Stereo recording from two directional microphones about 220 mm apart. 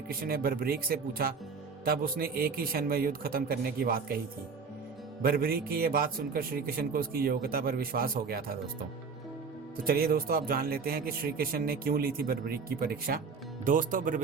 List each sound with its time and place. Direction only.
0.1 s speech: 45° right (ahead or behind)
5.2 s speech: 40° right (ahead or behind)
9.7 s speech: 40° right (ahead or behind)